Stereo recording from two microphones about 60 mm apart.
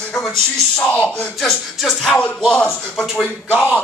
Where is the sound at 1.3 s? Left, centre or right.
Centre.